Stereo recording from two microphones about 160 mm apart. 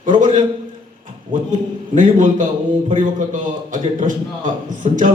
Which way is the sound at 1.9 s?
55° right (ahead or behind).